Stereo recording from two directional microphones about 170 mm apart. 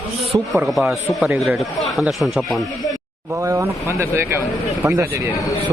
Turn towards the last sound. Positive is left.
turn(degrees=-15)  # may be behind; listen again after turning